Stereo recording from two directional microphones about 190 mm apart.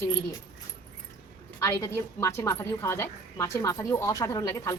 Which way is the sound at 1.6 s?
15° left (ahead or behind).